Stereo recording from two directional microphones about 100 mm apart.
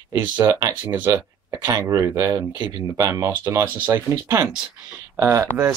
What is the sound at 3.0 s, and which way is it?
Speech, 30° right (ahead or behind).